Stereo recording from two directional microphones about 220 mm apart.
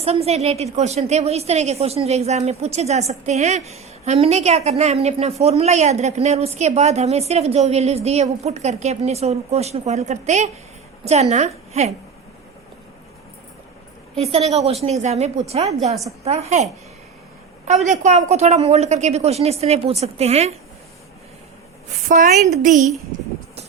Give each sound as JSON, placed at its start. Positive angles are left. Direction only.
{"t": 0.0, "sound": "a woman's voice", "side_deg": -25}
{"t": 14.2, "sound": "a woman's voice", "side_deg": -30}
{"t": 17.8, "sound": "a woman's voice", "side_deg": -30}
{"t": 21.8, "sound": "a woman's voice", "side_deg": -35}